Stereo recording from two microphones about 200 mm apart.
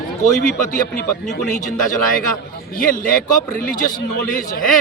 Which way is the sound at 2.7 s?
45° left (ahead or behind).